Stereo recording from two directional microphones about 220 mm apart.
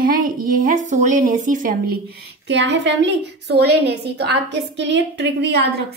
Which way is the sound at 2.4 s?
55° right (ahead or behind).